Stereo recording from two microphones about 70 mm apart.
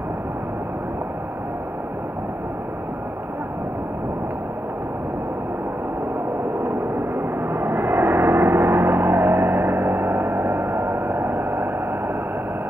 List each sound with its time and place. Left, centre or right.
7.2 s gong: right